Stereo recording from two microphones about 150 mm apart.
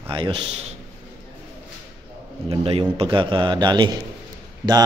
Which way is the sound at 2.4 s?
40° right (ahead or behind).